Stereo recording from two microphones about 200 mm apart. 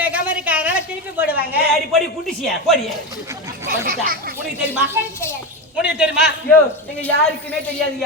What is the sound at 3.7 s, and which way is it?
Speech, 45° right (ahead or behind).